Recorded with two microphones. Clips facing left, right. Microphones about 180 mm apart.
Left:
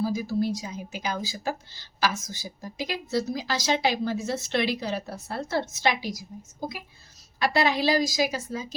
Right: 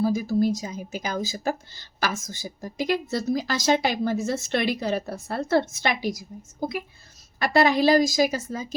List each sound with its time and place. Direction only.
0.0 s speech: 50° right (ahead or behind)
7.3 s speech: 50° right (ahead or behind)